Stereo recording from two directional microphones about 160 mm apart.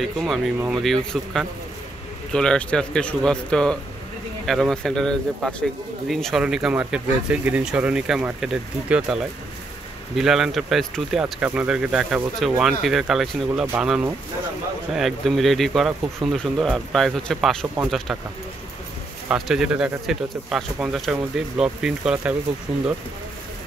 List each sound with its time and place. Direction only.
0.7 s speech: centre (ahead or behind)
19.2 s speech: 5° right (ahead or behind)
22.7 s speech: 40° right (ahead or behind)